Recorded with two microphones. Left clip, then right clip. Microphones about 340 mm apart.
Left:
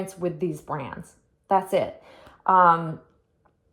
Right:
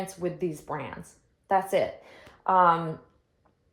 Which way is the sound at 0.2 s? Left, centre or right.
Left.